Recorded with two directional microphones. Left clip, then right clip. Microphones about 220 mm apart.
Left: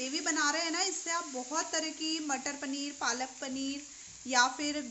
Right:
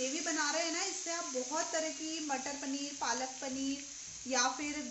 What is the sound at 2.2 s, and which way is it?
Speech, 45° left (ahead or behind).